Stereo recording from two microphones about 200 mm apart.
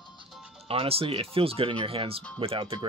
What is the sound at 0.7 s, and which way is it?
Speech, 30° right (ahead or behind).